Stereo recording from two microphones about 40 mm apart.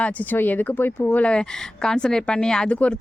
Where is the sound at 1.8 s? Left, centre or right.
Centre.